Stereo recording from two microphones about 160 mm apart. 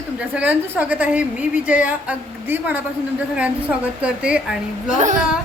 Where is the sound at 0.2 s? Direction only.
10° right (ahead or behind).